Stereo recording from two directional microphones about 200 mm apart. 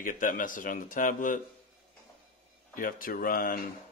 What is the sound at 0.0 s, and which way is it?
Speech, 45° left (ahead or behind).